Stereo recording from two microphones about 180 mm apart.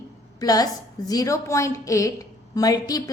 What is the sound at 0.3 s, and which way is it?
A woman's voice, 20° left (ahead or behind).